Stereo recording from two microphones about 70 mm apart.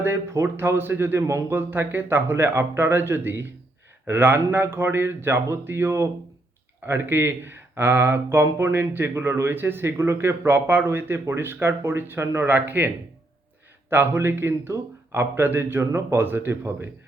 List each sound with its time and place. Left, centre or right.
0.0 s speech: right
13.9 s speech: right